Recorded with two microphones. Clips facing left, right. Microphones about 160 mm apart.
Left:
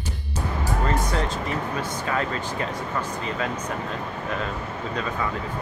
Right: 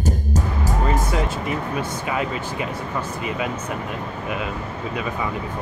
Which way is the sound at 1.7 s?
10° right (ahead or behind).